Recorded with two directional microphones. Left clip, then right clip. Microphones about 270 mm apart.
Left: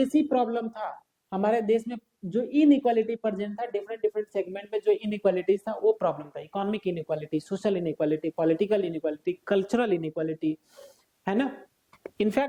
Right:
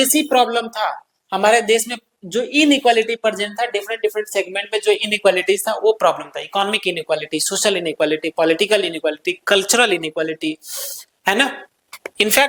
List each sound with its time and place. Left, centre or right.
0.0 s a woman's voice: centre